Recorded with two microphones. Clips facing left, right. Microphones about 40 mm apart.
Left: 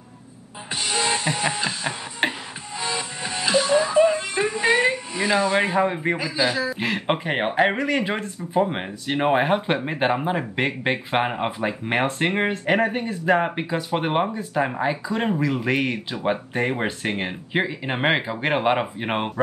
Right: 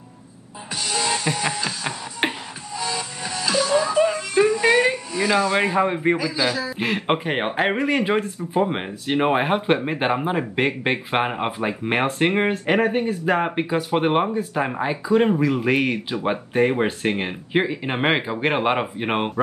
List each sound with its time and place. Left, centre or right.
0.7 s music: left
2.2 s music: centre
2.8 s music: left
5.1 s speech: left
5.5 s a man's voice: centre
6.1 s a man's voice: left
6.8 s speech: centre